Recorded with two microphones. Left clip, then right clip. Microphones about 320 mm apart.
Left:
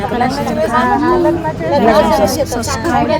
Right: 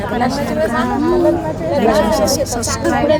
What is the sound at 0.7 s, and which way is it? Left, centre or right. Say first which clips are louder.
Speech: left 4 dB; left.